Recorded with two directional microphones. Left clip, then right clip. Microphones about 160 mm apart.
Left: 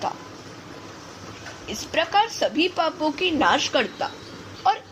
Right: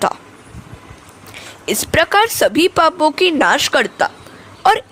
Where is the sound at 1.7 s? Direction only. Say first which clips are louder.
Right 10 dB; 70° right (ahead or behind).